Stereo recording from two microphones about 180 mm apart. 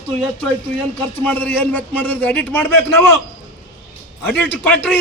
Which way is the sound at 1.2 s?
10° left (ahead or behind).